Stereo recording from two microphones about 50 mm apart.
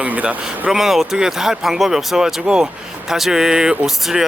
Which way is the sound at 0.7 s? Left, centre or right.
Centre.